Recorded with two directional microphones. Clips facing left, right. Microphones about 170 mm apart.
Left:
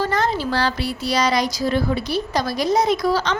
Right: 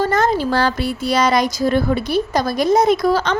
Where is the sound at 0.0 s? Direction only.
45° right (ahead or behind).